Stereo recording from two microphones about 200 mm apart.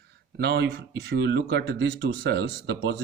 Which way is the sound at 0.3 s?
55° right (ahead or behind).